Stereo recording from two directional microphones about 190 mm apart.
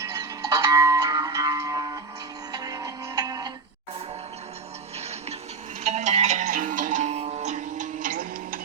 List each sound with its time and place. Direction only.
0.0 s music: 20° right (ahead or behind)
5.8 s music: 35° right (ahead or behind)